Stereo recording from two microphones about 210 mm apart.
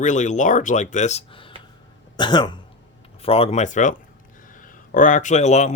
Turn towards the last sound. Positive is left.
turn(degrees=35)  # may be behind; listen again after turning